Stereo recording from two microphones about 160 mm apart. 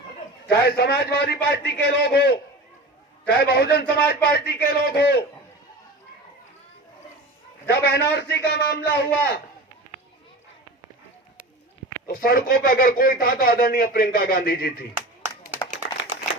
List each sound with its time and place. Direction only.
0.6 s a man's voice: 85° left
3.3 s a man's voice: 85° left
7.7 s a man's voice: 90° left
12.0 s speech: 65° left (ahead or behind)
14.9 s a sound: 10° right (ahead or behind)